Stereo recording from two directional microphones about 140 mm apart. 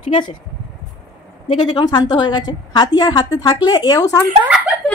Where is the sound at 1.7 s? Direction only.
30° left (ahead or behind).